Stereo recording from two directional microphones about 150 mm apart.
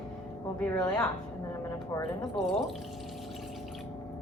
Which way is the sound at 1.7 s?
20° left (ahead or behind).